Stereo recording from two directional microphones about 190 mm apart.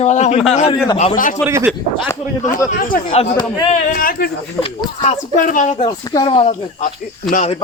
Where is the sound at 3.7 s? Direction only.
45° left (ahead or behind).